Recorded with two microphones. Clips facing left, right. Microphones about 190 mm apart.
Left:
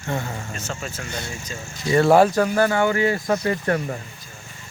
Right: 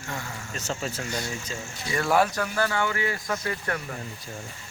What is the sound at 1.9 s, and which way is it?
Speech, 30° left (ahead or behind).